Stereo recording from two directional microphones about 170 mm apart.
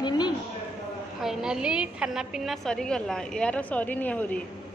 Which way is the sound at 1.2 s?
5° right (ahead or behind).